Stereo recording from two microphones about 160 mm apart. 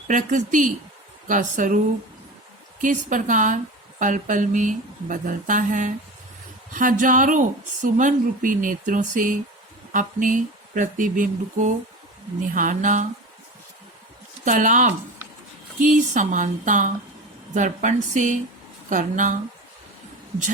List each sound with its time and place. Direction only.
0.1 s speech: 50° right (ahead or behind)
2.8 s a woman's voice: 55° right (ahead or behind)
14.4 s a woman's voice: 55° right (ahead or behind)